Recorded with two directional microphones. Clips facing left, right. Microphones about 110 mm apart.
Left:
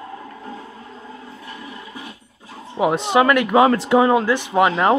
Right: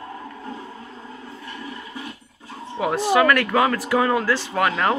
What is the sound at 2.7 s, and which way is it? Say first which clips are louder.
Speech: left 2 dB; 20° left (ahead or behind).